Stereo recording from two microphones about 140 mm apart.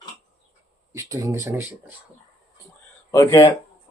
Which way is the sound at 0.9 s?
25° right (ahead or behind).